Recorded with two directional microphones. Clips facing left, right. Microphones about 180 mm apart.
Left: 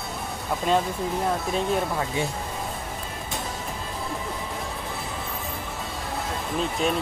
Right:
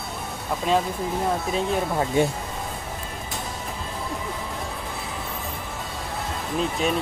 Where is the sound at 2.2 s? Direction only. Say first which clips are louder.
Right 9 dB; 50° right (ahead or behind).